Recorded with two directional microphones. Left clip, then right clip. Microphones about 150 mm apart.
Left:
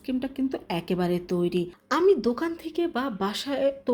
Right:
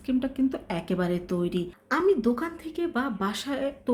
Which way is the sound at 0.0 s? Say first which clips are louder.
Right 2 dB; 15° left (ahead or behind).